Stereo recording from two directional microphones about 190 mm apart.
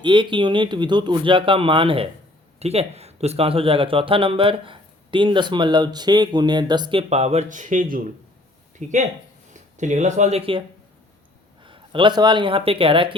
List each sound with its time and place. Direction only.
0.0 s speech: 25° right (ahead or behind)
11.6 s speech: 25° right (ahead or behind)